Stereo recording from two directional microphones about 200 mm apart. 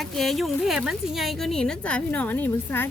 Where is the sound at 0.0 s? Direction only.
Centre (ahead or behind).